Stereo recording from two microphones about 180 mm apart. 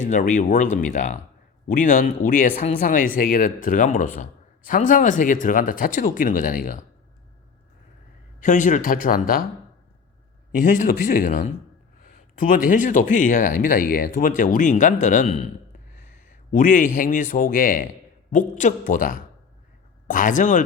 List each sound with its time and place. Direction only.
0.1 s speech: 45° left (ahead or behind)
8.4 s speech: 45° left (ahead or behind)
10.5 s speech: 45° left (ahead or behind)
16.5 s speech: 45° left (ahead or behind)